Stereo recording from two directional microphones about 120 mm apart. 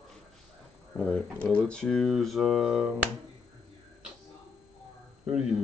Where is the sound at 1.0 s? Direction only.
10° left (ahead or behind).